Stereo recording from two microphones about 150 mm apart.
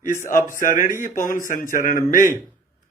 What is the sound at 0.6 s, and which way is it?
Speech, 65° left (ahead or behind).